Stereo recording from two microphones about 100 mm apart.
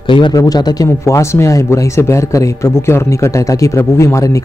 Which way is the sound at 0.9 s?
30° left (ahead or behind).